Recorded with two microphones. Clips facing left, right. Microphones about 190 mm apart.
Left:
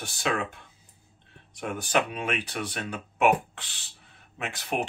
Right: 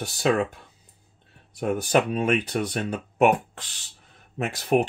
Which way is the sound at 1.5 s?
40° right (ahead or behind).